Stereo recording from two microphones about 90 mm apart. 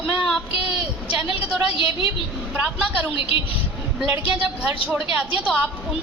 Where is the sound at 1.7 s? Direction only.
75° left (ahead or behind).